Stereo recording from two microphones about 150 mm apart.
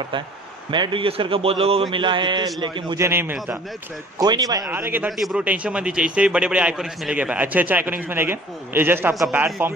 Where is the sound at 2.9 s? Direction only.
15° right (ahead or behind).